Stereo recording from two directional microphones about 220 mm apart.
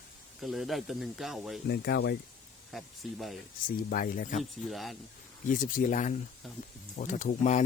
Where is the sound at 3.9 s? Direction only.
40° left (ahead or behind).